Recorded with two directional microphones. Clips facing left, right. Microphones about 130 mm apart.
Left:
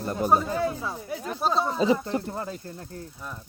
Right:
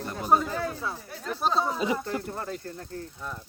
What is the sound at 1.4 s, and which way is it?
Speech, centre (ahead or behind).